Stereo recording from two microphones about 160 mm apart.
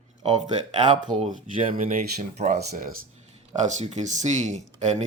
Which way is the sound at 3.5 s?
45° right (ahead or behind).